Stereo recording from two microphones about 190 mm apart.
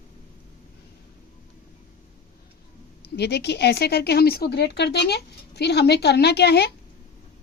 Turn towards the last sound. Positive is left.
turn(degrees=60)  # may be behind; listen again after turning